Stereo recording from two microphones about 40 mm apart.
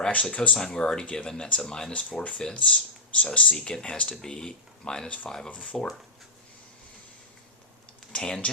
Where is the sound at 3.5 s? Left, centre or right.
Left.